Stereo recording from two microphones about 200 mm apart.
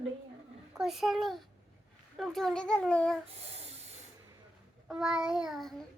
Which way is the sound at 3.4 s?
30° right (ahead or behind).